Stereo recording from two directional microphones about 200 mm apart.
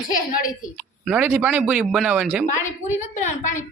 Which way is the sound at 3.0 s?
35° left (ahead or behind).